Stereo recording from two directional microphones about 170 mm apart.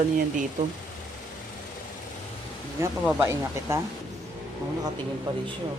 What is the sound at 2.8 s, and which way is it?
Speech, 15° right (ahead or behind).